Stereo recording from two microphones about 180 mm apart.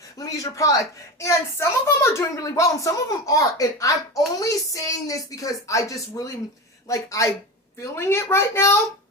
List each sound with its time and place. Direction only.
0.2 s a woman's voice: 20° left (ahead or behind)